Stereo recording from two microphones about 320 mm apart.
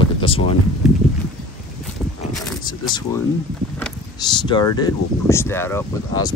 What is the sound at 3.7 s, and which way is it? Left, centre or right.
Speech, centre.